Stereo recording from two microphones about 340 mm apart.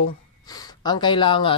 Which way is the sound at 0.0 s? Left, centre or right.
Centre.